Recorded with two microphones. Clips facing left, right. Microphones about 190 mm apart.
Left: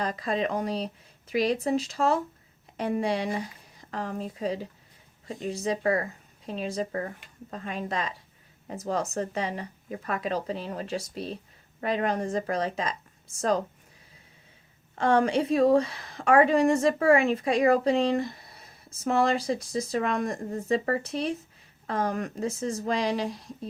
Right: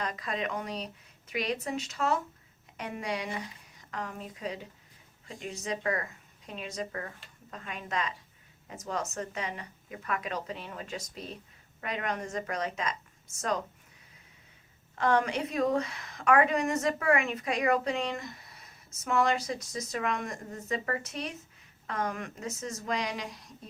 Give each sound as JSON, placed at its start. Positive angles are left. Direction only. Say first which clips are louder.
{"t": 0.0, "sound": "a woman's voice", "louder": "left 6 dB", "side_deg": 35}
{"t": 14.9, "sound": "a woman's voice", "louder": "left 5 dB", "side_deg": 30}